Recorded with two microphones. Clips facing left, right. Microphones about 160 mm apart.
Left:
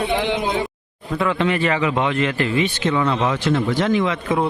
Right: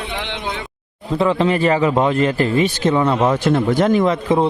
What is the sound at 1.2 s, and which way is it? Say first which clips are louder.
Speech: right 4 dB; 35° right (ahead or behind).